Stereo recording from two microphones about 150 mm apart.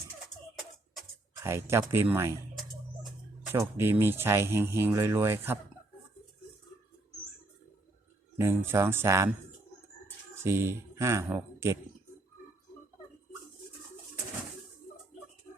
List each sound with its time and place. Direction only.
1.5 s speech: 15° right (ahead or behind)
3.5 s speech: 15° right (ahead or behind)
8.4 s speech: 15° right (ahead or behind)
10.4 s speech: 15° right (ahead or behind)